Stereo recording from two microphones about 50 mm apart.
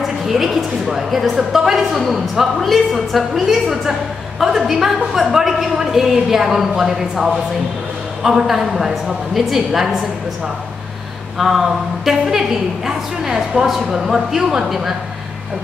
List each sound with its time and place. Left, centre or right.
0.0 s a woman's voice: centre
11.3 s a woman's voice: centre